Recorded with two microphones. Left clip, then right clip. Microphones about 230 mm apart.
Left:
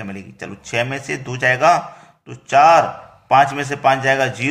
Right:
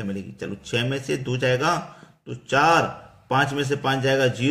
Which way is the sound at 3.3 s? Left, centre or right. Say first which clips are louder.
Left 8 dB; centre.